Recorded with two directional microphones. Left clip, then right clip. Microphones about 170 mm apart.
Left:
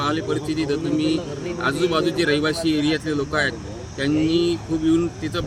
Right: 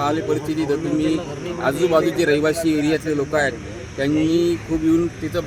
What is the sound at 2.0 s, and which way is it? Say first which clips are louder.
Speech: right 3 dB; 10° left (ahead or behind).